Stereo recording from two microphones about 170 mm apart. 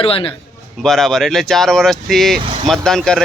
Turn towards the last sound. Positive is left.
turn(degrees=5)  # may be behind; listen again after turning